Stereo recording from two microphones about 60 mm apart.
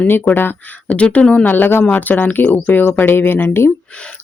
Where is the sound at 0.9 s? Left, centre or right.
Left.